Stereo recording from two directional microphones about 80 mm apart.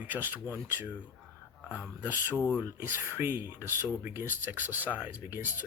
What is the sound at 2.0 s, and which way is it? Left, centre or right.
Speech, right.